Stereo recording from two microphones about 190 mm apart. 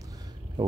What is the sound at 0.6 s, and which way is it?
Speech, 25° right (ahead or behind).